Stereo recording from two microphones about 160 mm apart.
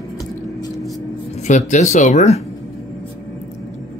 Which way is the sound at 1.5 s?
50° left (ahead or behind).